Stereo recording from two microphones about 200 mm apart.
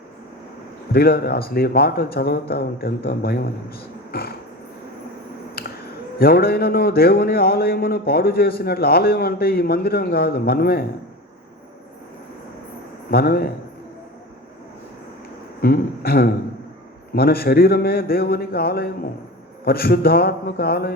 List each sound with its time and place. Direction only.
0.9 s a man's voice: 50° left (ahead or behind)
5.6 s a sound: 50° left (ahead or behind)
6.1 s a man's voice: 50° left (ahead or behind)
13.1 s a man's voice: 50° left (ahead or behind)
15.6 s a man's voice: 50° left (ahead or behind)